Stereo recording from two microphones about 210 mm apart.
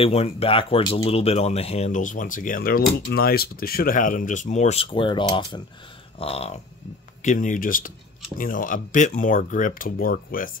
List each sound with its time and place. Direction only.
0.0 s speech: 30° left (ahead or behind)
7.2 s speech: 40° left (ahead or behind)